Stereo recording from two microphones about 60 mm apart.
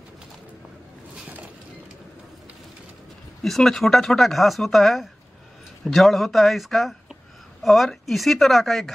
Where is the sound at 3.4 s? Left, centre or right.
Centre.